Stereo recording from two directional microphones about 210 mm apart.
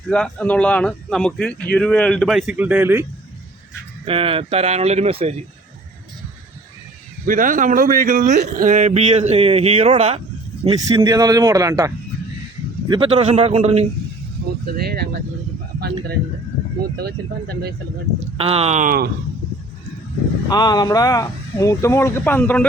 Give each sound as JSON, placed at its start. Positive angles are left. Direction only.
{"t": 0.1, "sound": "speech", "side_deg": 5}
{"t": 4.0, "sound": "speech", "side_deg": -25}
{"t": 7.3, "sound": "speech", "side_deg": -40}
{"t": 10.6, "sound": "speech", "side_deg": -20}
{"t": 12.9, "sound": "speech", "side_deg": -25}
{"t": 14.4, "sound": "speech", "side_deg": -50}
{"t": 16.8, "sound": "speech", "side_deg": -50}
{"t": 18.3, "sound": "speech", "side_deg": -30}
{"t": 20.5, "sound": "speech", "side_deg": 20}